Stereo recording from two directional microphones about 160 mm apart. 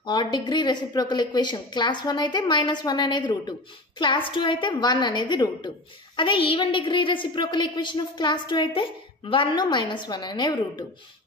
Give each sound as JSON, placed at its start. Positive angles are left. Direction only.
{"t": 0.0, "sound": "a woman's voice", "side_deg": 30}